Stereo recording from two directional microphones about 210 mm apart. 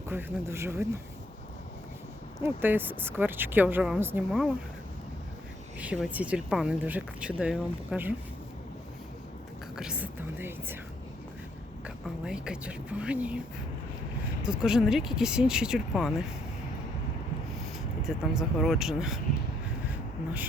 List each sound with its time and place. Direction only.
0.1 s a woman's voice: 10° right (ahead or behind)
2.4 s a woman's voice: 10° right (ahead or behind)
5.8 s speech: 5° right (ahead or behind)
9.7 s a woman's voice: 5° right (ahead or behind)
12.2 s speech: 5° right (ahead or behind)
14.4 s speech: 5° right (ahead or behind)
18.0 s speech: centre (ahead or behind)